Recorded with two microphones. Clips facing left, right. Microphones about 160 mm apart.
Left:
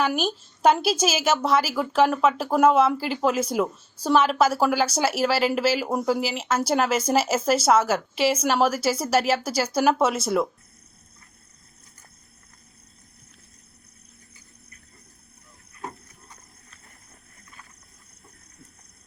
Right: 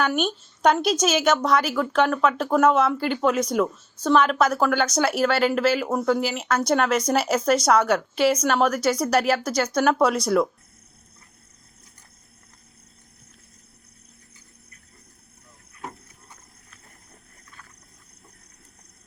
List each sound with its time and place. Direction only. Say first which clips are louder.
0.0 s a woman's voice: right 1 dB; centre (ahead or behind)